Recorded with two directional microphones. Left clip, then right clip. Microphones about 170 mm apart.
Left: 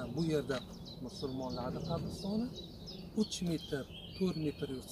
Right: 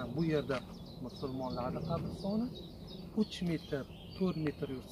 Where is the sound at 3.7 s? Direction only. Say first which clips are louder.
Even; 10° right (ahead or behind).